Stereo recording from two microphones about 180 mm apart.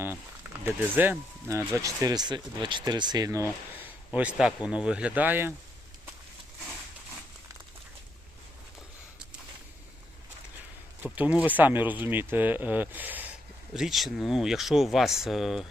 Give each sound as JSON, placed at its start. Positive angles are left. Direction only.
{"t": 0.6, "sound": "speech", "side_deg": -10}
{"t": 3.8, "sound": "a man's voice", "side_deg": -10}
{"t": 11.0, "sound": "speech", "side_deg": -10}